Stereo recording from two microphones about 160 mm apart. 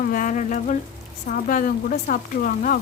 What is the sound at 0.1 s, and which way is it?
Speech, 55° left (ahead or behind).